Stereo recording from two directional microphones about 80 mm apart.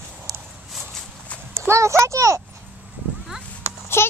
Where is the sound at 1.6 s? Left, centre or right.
Right.